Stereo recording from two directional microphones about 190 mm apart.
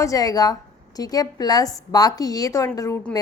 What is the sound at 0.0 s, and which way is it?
A woman's voice, 20° left (ahead or behind).